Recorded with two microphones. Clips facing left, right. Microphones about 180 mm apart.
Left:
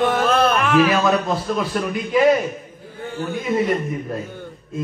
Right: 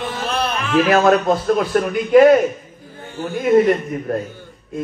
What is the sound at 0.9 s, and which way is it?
A man's voice, 55° right (ahead or behind).